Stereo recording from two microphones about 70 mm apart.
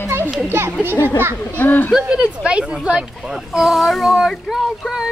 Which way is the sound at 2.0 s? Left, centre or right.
Centre.